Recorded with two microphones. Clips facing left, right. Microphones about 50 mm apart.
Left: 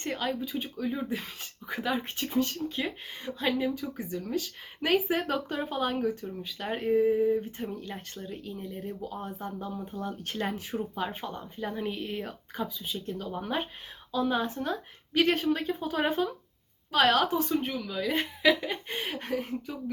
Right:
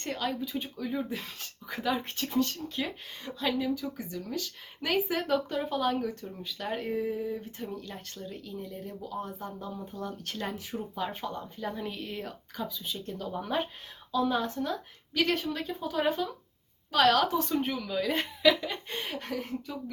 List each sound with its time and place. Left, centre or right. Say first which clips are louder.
0.0 s speech: left 1 dB; centre
2.8 s speech: left 2 dB; left
8.4 s speech: left 2 dB; left
9.1 s speech: even; left
17.6 s speech: right 1 dB; centre
19.1 s speech: left 4 dB; left